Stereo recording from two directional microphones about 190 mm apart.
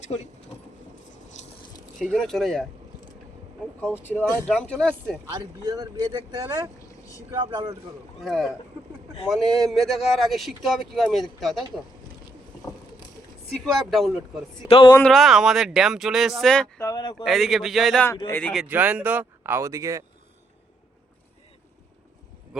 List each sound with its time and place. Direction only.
0.0 s speech: 35° left (ahead or behind)
2.0 s speech: 5° left (ahead or behind)
3.9 s speech: 10° left (ahead or behind)
5.3 s speech: 20° right (ahead or behind)
8.2 s speech: centre (ahead or behind)
13.9 s speech: centre (ahead or behind)
14.6 s speech: 25° left (ahead or behind)
14.9 s speech: 5° left (ahead or behind)
16.8 s speech: 20° left (ahead or behind)
17.2 s speech: centre (ahead or behind)
18.7 s speech: 10° right (ahead or behind)